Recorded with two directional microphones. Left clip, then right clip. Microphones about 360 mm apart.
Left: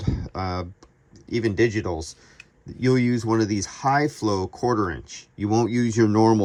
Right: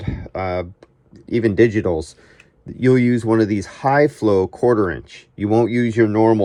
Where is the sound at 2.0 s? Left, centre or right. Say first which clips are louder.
Right 8 dB; centre.